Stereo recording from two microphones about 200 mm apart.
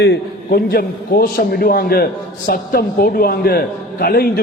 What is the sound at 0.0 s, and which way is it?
A man's voice, 55° left (ahead or behind).